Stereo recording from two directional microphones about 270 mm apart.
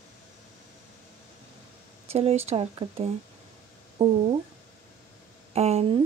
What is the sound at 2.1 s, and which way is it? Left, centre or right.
Speech, right.